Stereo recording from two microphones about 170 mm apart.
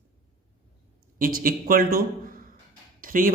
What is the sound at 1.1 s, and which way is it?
Speech, 55° right (ahead or behind).